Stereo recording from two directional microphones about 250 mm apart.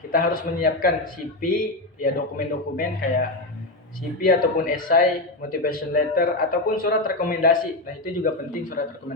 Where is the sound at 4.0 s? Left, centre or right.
Left.